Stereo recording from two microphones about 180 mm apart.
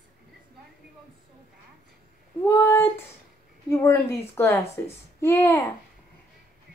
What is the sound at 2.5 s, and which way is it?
Speech, 15° left (ahead or behind).